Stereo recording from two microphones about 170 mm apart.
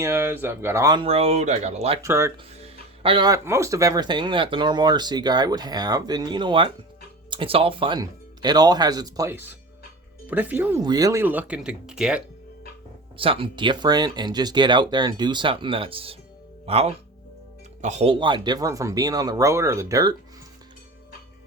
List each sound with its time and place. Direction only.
0.0 s speech: 15° right (ahead or behind)
1.0 s speech: 35° right (ahead or behind)
2.0 s speech: 15° right (ahead or behind)
2.5 s speech: 35° right (ahead or behind); by 10.8 s 10° right (ahead or behind)
10.8 s speech: 20° right (ahead or behind); by 12.2 s 5° right (ahead or behind)
13.1 s speech: 30° right (ahead or behind)